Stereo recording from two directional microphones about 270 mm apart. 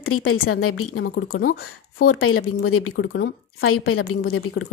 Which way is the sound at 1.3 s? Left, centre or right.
Left.